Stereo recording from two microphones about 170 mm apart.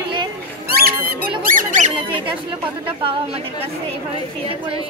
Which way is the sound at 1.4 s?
55° right (ahead or behind).